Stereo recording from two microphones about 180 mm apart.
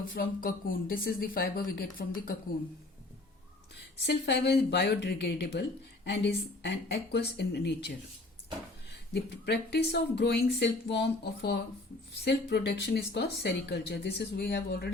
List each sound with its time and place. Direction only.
0.1 s speech: 55° left (ahead or behind)
4.0 s speech: 65° left (ahead or behind)
9.1 s speech: 70° left (ahead or behind)